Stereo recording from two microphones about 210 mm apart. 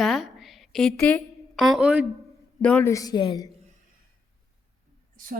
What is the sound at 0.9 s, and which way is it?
Speech, 10° left (ahead or behind).